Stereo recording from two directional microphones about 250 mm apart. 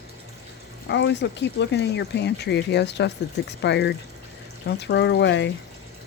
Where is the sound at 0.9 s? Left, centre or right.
Left.